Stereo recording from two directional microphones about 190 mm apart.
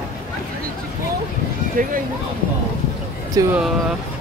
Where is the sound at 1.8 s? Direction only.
45° right (ahead or behind).